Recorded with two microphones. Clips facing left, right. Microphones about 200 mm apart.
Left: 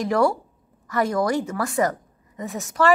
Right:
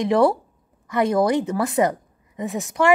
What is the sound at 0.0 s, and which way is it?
A woman's voice, 20° right (ahead or behind).